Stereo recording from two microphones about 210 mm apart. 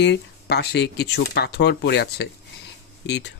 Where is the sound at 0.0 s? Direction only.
55° left (ahead or behind).